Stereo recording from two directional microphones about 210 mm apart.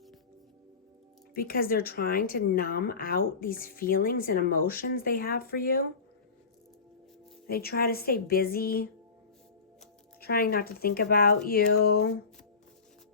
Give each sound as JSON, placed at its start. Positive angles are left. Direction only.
{"t": 1.3, "sound": "a woman's voice", "side_deg": 45}
{"t": 7.4, "sound": "a woman's voice", "side_deg": 45}
{"t": 10.2, "sound": "a woman's voice", "side_deg": 45}